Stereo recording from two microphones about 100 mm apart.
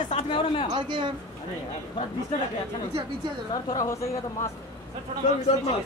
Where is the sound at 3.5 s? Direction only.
45° left (ahead or behind).